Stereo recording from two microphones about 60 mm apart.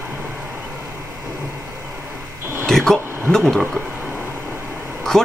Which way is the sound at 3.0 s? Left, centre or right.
Right.